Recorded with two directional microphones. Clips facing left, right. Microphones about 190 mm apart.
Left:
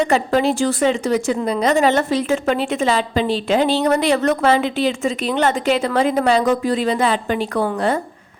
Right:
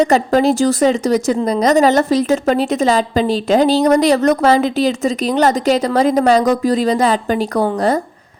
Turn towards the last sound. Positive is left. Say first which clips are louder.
# right 4 dB
turn(degrees=-40)  # may be behind; listen again after turning